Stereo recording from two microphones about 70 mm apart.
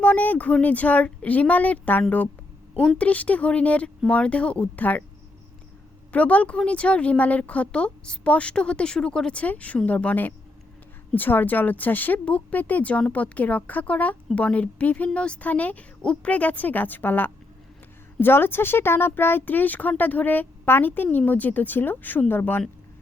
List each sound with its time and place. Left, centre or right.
0.0 s speech: left
6.1 s a woman's voice: left